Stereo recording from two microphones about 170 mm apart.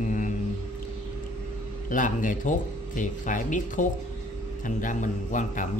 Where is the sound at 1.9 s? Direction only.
50° left (ahead or behind).